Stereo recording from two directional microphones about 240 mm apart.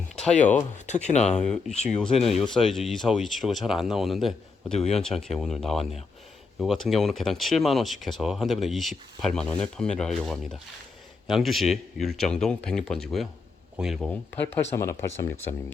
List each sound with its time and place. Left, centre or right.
0.9 s speech: left
1.2 s speech: centre